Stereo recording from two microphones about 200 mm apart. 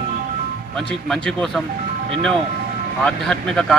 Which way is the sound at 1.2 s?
Centre (ahead or behind).